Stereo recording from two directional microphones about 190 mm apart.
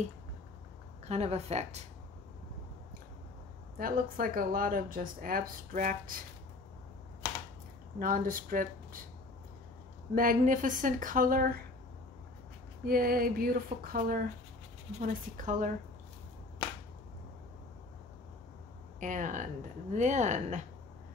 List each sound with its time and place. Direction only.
1.0 s speech: 35° right (ahead or behind)
3.7 s speech: 50° right (ahead or behind)
8.0 s speech: 45° right (ahead or behind)
10.1 s speech: 45° right (ahead or behind)
12.8 s speech: 50° right (ahead or behind)
18.9 s speech: 40° right (ahead or behind)